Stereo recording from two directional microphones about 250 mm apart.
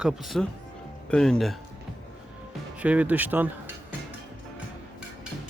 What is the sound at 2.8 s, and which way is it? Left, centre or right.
Speech, centre.